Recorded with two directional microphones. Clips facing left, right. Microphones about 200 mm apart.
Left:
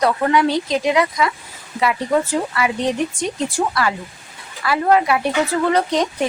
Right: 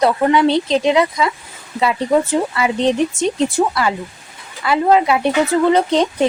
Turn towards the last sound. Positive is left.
turn(degrees=-25)  # may be behind; listen again after turning